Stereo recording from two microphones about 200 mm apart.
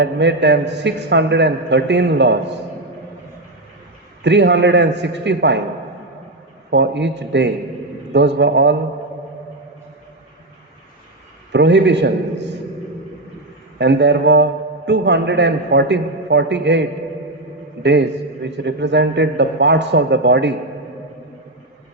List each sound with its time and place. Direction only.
0.0 s a man's voice: 60° right (ahead or behind)
4.2 s a man's voice: 60° right (ahead or behind)
6.7 s a man's voice: 60° right (ahead or behind)
11.5 s a man's voice: 60° right (ahead or behind)
13.7 s a man's voice: 60° right (ahead or behind)
17.8 s a man's voice: 60° right (ahead or behind)